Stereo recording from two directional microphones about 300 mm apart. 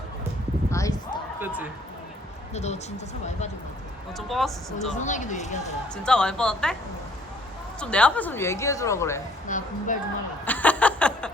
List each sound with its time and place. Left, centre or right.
0.7 s a sound: centre
2.5 s speech: left
4.3 s a woman's voice: centre
4.9 s speech: left
6.0 s a woman's voice: centre
7.8 s speech: centre
9.5 s speech: left
10.4 s snicker: centre